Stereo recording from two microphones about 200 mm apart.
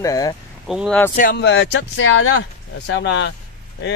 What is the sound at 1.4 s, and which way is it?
Speech, 60° left (ahead or behind).